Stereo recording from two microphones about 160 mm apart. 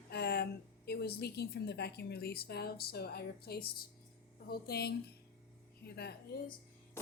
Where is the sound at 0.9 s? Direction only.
80° left.